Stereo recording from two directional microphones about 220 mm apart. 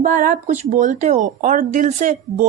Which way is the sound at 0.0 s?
35° right (ahead or behind).